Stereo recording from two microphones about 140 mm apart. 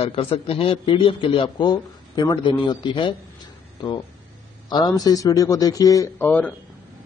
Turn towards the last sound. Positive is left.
turn(degrees=15)  # may be behind; listen again after turning